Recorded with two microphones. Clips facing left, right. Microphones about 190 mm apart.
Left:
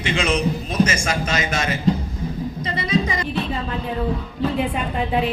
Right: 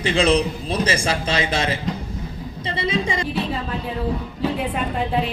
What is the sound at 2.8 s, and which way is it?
Music, 30° right (ahead or behind).